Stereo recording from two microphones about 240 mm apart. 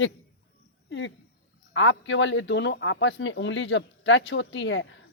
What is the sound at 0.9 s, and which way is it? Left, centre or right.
Speech, left.